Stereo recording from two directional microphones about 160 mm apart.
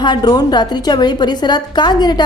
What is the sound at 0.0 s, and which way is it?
A woman's voice, 25° left (ahead or behind).